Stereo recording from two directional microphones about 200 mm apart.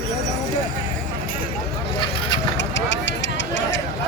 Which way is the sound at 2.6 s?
65° left (ahead or behind).